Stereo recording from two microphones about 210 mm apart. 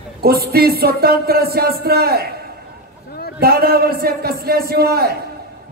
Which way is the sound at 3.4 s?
45° right (ahead or behind).